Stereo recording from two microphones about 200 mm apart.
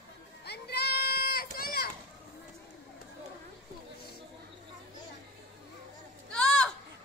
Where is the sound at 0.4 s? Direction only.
55° left (ahead or behind).